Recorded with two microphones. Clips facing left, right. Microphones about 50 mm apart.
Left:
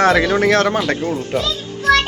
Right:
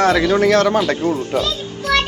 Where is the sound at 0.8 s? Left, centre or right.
Centre.